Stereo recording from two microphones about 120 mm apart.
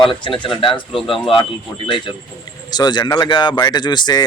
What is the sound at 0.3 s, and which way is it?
Speech, 45° left (ahead or behind).